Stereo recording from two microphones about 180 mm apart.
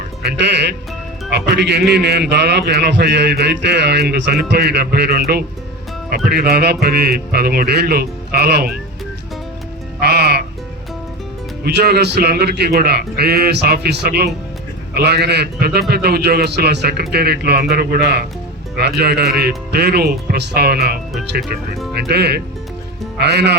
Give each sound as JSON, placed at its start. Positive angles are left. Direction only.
{"t": 0.2, "sound": "a man's voice", "side_deg": -65}
{"t": 10.0, "sound": "music", "side_deg": -65}
{"t": 11.6, "sound": "a man's voice", "side_deg": -60}